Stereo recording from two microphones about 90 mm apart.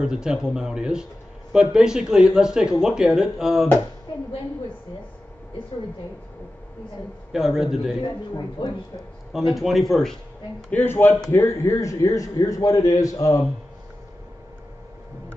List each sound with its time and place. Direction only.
0.0 s speech: 10° right (ahead or behind)
7.3 s a man's voice: 5° right (ahead or behind)
9.5 s a man's voice: centre (ahead or behind)
10.7 s speech: 20° left (ahead or behind)
11.2 s a man's voice: 35° left (ahead or behind)